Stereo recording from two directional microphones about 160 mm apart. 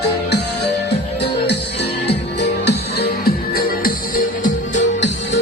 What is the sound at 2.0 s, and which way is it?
Music, 90° left.